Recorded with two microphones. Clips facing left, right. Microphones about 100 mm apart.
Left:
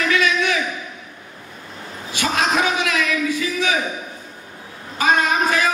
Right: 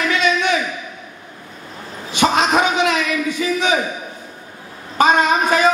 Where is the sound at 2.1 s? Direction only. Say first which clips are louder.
Right 5 dB; 25° right (ahead or behind).